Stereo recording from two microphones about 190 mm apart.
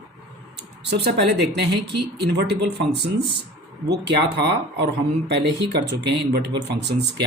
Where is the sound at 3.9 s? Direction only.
65° right (ahead or behind).